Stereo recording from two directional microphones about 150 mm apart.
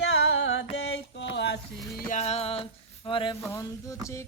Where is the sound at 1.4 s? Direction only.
85° left.